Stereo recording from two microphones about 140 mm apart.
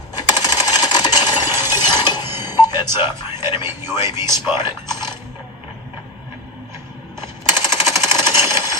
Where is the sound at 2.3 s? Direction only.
15° right (ahead or behind).